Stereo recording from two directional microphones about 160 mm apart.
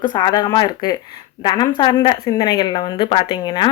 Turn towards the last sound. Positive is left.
turn(degrees=30)  # may be behind; listen again after turning